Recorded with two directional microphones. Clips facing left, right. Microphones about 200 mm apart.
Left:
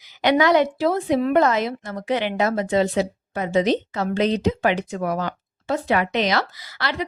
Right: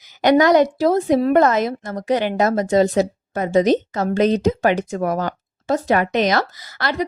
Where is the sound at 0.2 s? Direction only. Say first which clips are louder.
Right 4 dB; 45° right (ahead or behind).